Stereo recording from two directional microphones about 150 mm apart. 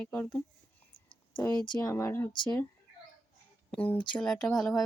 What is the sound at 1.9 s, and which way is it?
Speech, 15° left (ahead or behind).